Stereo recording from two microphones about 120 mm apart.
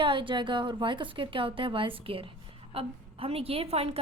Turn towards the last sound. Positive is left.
turn(degrees=-55)  # may be behind; listen again after turning